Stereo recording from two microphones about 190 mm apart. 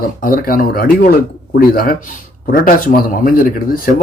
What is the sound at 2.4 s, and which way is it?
Speech, 45° left (ahead or behind).